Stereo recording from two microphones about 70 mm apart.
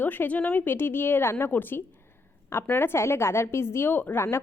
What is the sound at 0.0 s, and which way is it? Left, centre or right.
A woman's voice, left.